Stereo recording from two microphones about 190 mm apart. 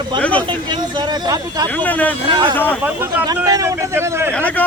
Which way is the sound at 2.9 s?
15° right (ahead or behind).